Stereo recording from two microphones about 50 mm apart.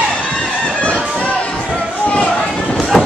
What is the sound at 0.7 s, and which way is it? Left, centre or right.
Fowl, left.